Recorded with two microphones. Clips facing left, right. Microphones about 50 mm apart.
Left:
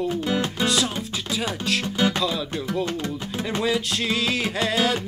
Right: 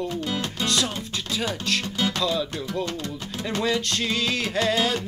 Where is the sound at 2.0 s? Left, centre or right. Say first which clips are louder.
Left 5 dB; left.